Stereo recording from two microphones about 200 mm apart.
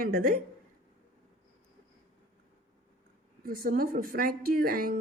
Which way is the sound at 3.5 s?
45° right (ahead or behind).